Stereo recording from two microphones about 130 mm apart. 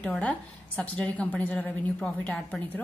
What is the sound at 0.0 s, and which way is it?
A woman's voice, 10° left (ahead or behind).